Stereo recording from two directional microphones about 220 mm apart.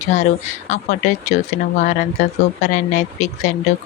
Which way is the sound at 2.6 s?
30° left (ahead or behind).